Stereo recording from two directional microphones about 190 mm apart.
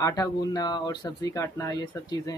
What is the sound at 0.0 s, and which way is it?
Speech, 20° left (ahead or behind).